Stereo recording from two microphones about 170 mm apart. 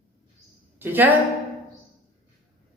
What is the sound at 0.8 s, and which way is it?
Speech, 10° right (ahead or behind).